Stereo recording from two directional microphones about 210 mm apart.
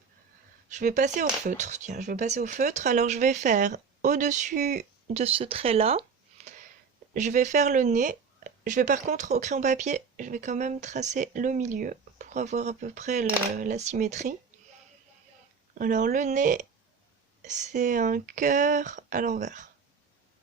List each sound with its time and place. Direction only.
0.7 s speech: 35° right (ahead or behind)
15.8 s speech: 40° right (ahead or behind)